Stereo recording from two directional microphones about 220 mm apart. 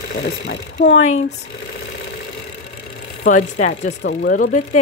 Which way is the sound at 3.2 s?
35° left (ahead or behind).